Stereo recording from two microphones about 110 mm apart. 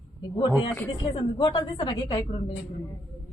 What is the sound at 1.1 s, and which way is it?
A woman's voice, 40° left (ahead or behind).